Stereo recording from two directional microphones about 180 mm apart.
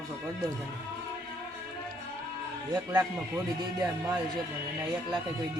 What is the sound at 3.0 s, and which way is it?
A man's voice, 20° right (ahead or behind).